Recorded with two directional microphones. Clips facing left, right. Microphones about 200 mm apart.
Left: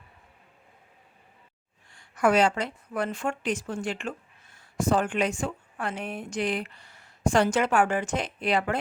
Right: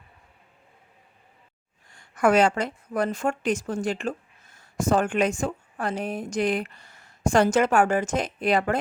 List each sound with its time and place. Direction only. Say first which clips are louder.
1.9 s a woman's voice: right 2 dB; 45° right (ahead or behind)